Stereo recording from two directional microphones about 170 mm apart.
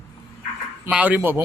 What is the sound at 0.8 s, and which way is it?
Speech, 10° right (ahead or behind).